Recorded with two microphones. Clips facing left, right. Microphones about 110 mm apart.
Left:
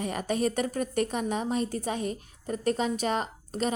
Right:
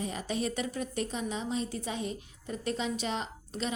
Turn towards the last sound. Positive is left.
turn(degrees=50)  # may be behind; listen again after turning